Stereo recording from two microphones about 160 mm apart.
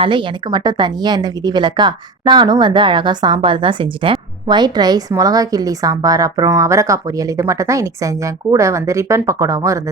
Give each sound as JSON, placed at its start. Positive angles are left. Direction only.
{"t": 0.0, "sound": "a woman's voice", "side_deg": -30}